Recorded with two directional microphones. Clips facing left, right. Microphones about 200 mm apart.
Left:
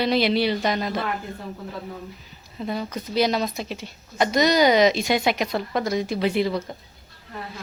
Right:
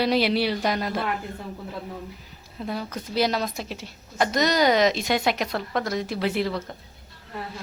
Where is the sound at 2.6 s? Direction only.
5° right (ahead or behind).